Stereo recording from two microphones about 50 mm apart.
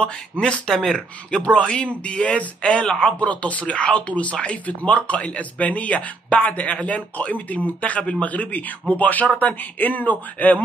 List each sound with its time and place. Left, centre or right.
0.0 s a man's voice: centre